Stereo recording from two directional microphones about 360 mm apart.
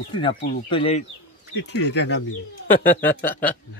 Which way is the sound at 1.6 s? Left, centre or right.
Left.